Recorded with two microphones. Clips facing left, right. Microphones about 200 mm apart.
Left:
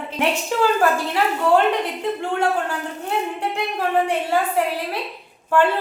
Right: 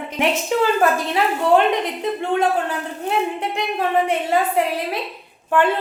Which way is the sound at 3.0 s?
20° right (ahead or behind).